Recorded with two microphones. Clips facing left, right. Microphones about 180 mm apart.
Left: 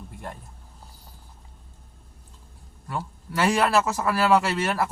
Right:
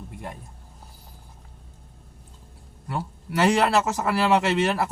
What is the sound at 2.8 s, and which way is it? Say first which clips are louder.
A man's voice: right 1 dB; 20° right (ahead or behind).